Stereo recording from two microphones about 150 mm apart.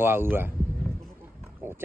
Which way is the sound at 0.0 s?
15° right (ahead or behind).